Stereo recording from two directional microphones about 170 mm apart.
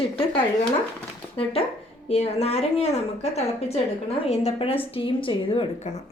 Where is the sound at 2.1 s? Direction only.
40° left (ahead or behind).